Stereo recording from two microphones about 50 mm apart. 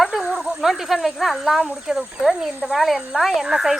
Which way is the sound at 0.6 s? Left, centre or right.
Centre.